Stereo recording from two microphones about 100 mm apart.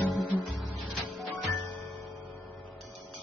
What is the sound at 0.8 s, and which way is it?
Music, centre (ahead or behind).